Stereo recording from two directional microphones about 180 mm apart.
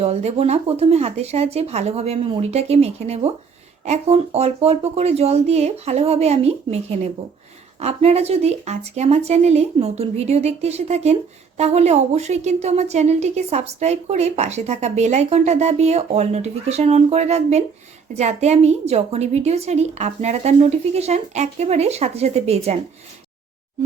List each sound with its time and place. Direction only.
0.0 s a woman's voice: 35° right (ahead or behind)